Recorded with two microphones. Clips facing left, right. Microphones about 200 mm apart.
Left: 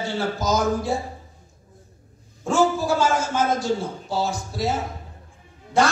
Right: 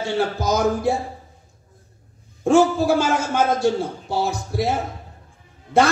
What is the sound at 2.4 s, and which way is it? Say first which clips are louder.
A man's voice: right 5 dB; 60° right (ahead or behind).